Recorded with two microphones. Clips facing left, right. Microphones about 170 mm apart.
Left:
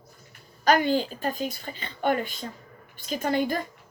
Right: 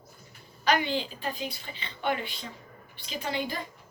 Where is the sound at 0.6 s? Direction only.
45° left (ahead or behind).